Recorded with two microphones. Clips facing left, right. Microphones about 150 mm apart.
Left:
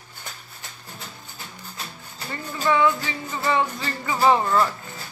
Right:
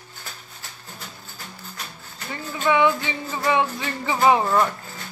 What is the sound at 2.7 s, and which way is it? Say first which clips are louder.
Speech: right 1 dB; 20° right (ahead or behind).